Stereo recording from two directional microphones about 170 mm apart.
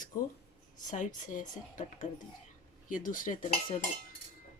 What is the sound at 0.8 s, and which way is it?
Speech, 45° left (ahead or behind).